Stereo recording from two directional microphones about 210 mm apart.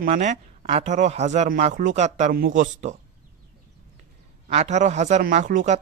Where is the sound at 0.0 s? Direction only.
40° right (ahead or behind).